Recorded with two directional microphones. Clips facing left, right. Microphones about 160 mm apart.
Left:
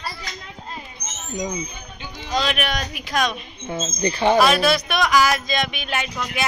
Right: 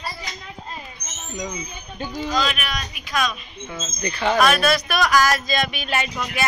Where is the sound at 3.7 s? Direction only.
30° left (ahead or behind).